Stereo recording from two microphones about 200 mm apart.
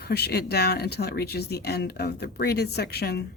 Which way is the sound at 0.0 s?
50° left (ahead or behind).